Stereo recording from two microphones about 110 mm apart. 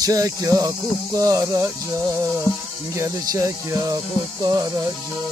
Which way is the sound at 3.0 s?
25° right (ahead or behind).